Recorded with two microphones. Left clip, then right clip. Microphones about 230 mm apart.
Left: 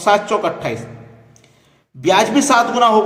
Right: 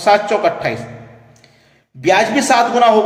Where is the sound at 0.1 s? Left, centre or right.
Left.